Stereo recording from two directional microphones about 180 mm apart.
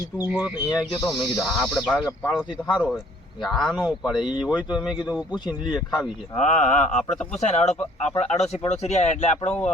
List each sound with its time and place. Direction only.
0.3 s speech: 5° right (ahead or behind)
0.7 s speech: 25° left (ahead or behind)
1.0 s speech: 5° left (ahead or behind)
6.3 s speech: 40° left (ahead or behind)
9.5 s speech: 5° left (ahead or behind)